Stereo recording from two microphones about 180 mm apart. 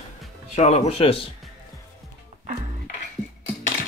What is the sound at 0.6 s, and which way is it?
Speech, 35° left (ahead or behind).